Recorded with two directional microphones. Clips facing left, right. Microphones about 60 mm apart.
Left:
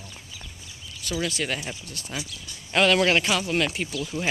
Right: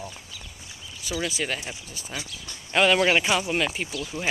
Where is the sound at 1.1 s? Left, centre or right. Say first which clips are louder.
Left 1 dB; centre.